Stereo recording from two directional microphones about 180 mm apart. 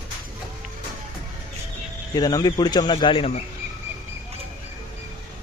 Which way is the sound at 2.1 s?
20° left (ahead or behind).